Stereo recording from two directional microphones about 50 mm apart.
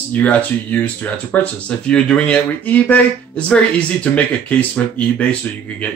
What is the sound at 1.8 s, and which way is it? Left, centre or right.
Speech, centre.